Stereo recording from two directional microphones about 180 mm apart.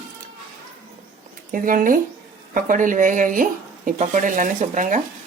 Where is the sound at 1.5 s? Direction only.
50° right (ahead or behind).